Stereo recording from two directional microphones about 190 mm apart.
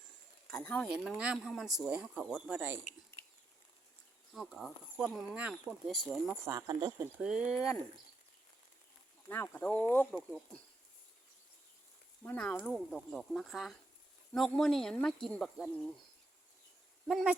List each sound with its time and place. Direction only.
0.4 s speech: 5° left (ahead or behind)
4.4 s speech: centre (ahead or behind)
6.3 s speech: 15° right (ahead or behind)
7.2 s speech: 5° right (ahead or behind)
9.3 s speech: 10° left (ahead or behind)
12.2 s speech: 5° left (ahead or behind)
17.1 s speech: 5° right (ahead or behind)